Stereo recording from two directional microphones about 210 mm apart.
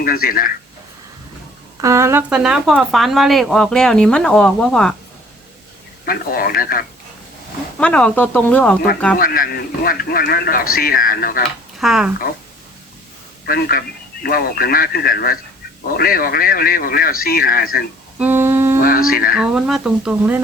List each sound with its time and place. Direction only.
0.0 s a man's voice: 45° left (ahead or behind)
1.8 s speech: 15° right (ahead or behind); by 4.9 s 5° left (ahead or behind)
6.1 s a man's voice: 45° left (ahead or behind)
7.8 s speech: 5° left (ahead or behind)
9.1 s a man's voice: 40° left (ahead or behind)
11.8 s speech: centre (ahead or behind)
13.4 s a man's voice: 45° left (ahead or behind)
18.2 s humming: 10° right (ahead or behind)
18.8 s a sound: 45° left (ahead or behind)
19.1 s a man's voice: 45° left (ahead or behind)
19.4 s speech: 5° right (ahead or behind)